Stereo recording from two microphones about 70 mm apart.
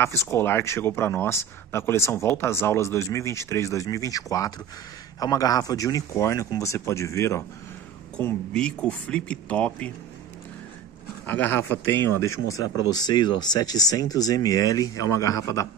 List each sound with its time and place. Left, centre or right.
0.0 s speech: left
6.6 s speech: left
8.5 s speech: centre
11.2 s speech: left
12.2 s speech: left
12.9 s speech: left